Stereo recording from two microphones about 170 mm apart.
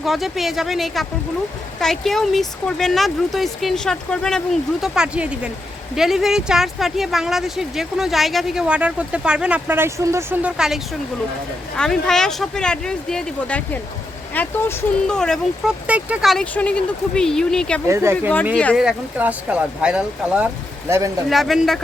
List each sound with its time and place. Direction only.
0.0 s speech: centre (ahead or behind)
11.8 s speech: 5° left (ahead or behind)
15.9 s speech: 10° right (ahead or behind)
17.8 s speech: 15° right (ahead or behind)
18.5 s speech: 5° left (ahead or behind)
18.8 s speech: 5° right (ahead or behind)